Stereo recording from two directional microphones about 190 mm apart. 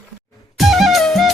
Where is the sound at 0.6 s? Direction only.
Centre (ahead or behind).